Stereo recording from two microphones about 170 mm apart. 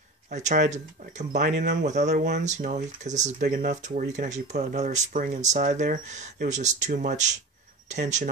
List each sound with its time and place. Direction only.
0.3 s speech: 45° right (ahead or behind)
3.4 s speech: 65° right (ahead or behind)
3.7 s speech: 45° right (ahead or behind)